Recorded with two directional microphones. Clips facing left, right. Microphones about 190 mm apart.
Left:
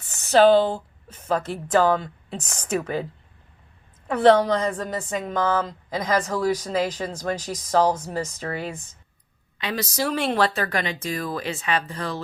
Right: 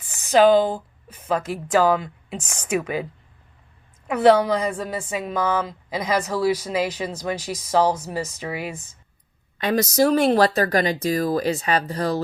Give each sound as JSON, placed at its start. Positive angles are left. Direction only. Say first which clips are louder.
{"t": 0.1, "sound": "a woman's voice", "louder": "even", "side_deg": -15}
{"t": 4.1, "sound": "a woman's voice", "louder": "right 1 dB", "side_deg": -5}
{"t": 9.6, "sound": "speech", "louder": "right 8 dB", "side_deg": -45}